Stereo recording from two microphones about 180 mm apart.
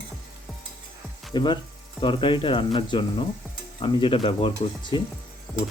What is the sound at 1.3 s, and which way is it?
Speech, 25° left (ahead or behind).